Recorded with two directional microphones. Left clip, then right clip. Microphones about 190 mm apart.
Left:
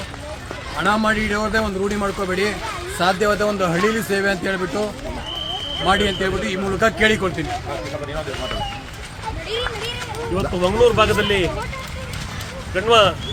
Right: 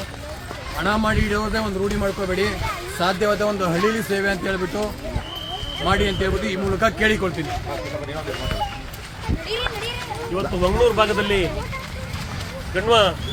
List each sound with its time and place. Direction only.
0.8 s a man's voice: 15° left (ahead or behind)
5.8 s a man's voice: 15° left (ahead or behind)
10.3 s speech: 5° left (ahead or behind)
12.7 s speech: centre (ahead or behind)